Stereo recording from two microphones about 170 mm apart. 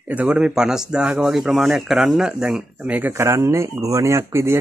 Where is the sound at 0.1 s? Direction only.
5° right (ahead or behind).